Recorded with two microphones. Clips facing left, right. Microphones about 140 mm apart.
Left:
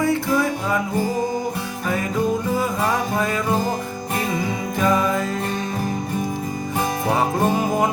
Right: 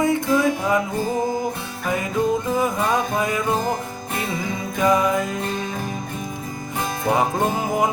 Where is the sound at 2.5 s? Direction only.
20° right (ahead or behind).